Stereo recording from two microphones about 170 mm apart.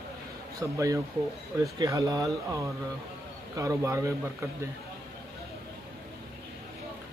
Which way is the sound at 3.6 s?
15° right (ahead or behind).